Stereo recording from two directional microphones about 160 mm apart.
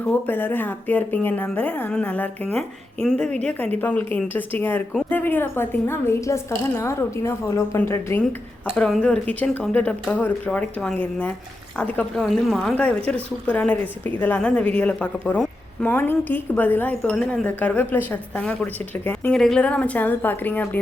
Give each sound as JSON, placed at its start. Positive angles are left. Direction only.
{"t": 0.0, "sound": "a woman's voice", "side_deg": 10}